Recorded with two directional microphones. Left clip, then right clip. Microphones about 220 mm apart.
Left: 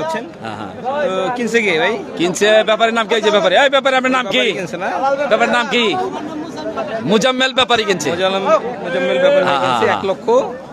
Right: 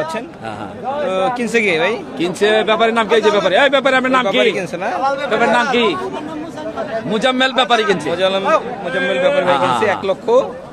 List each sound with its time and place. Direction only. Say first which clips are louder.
1.1 s a man's voice: even; 10° right (ahead or behind)
2.1 s a man's voice: left 3 dB; 25° left (ahead or behind)
5.3 s a man's voice: right 2 dB; 45° left (ahead or behind)
7.1 s a man's voice: left 1 dB; 55° left (ahead or behind)
8.1 s a man's voice: left 2 dB; centre (ahead or behind)
9.4 s a man's voice: even; 45° left (ahead or behind)
10.0 s a man's voice: even; centre (ahead or behind)